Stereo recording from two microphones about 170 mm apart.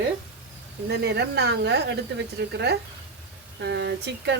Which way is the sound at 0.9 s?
75° right (ahead or behind).